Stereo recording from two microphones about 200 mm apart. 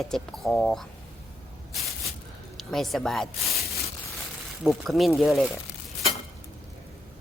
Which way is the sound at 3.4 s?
30° left (ahead or behind).